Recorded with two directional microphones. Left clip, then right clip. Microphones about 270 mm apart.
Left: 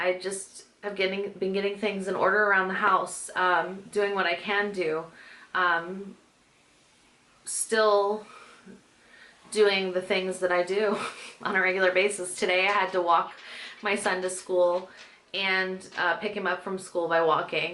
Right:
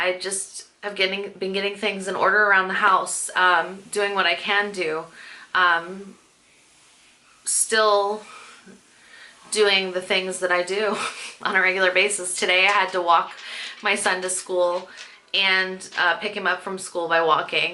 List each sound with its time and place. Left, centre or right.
0.0 s speech: centre
7.4 s speech: centre
9.5 s speech: centre
14.4 s speech: left
14.7 s speech: centre